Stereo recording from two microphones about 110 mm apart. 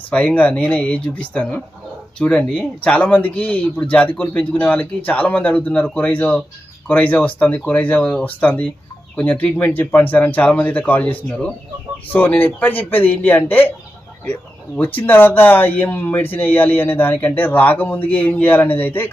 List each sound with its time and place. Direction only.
0.1 s speech: 15° left (ahead or behind)
14.8 s speech: 15° left (ahead or behind)